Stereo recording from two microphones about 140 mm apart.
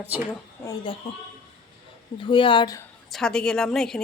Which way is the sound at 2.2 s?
35° left (ahead or behind).